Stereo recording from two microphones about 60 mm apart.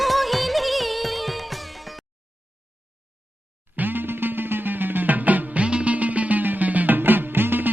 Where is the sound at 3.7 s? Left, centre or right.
Right.